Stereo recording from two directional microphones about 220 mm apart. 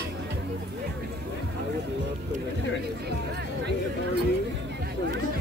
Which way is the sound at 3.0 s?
50° right (ahead or behind).